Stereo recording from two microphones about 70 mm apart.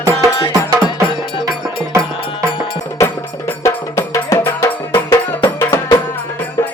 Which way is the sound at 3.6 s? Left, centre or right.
Left.